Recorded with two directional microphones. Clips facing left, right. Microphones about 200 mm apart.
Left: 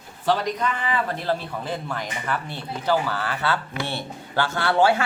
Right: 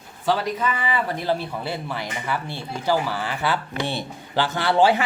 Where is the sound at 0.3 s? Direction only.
5° right (ahead or behind).